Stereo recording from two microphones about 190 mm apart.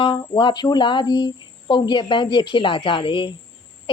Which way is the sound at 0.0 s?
25° left (ahead or behind).